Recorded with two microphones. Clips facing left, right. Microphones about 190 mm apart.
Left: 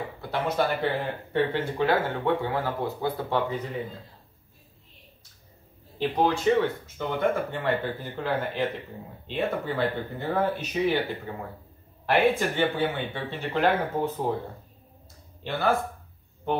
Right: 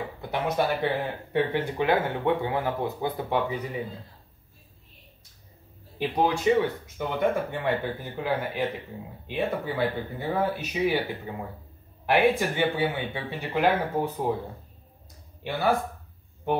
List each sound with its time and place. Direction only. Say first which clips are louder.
0.2 s speech: even; 15° right (ahead or behind)
5.9 s speech: left 1 dB; 10° right (ahead or behind)
15.4 s speech: even; 15° right (ahead or behind)